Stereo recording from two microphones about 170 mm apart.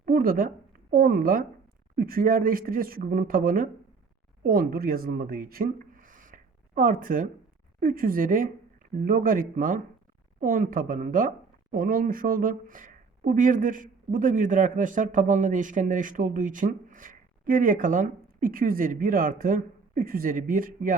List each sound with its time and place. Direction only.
0.0 s speech: 60° right (ahead or behind)